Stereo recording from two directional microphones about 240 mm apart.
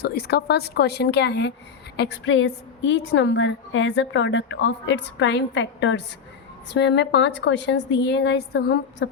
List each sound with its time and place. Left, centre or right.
0.0 s a woman's voice: left